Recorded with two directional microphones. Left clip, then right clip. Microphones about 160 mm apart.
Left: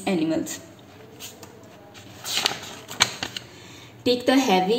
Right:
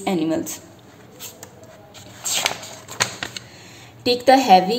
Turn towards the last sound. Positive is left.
turn(degrees=-15)  # may be behind; listen again after turning